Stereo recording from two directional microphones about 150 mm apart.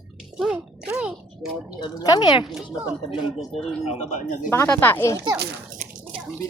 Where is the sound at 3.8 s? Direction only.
45° left (ahead or behind).